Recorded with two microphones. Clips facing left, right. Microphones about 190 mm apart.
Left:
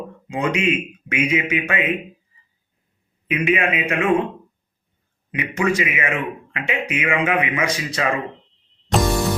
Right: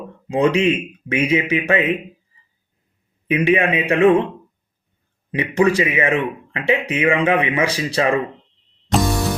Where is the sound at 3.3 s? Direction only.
35° right (ahead or behind).